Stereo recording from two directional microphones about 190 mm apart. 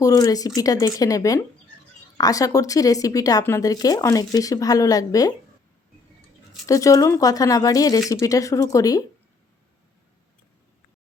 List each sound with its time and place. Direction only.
0.0 s a woman's voice: 20° left (ahead or behind)
6.7 s a woman's voice: 15° left (ahead or behind)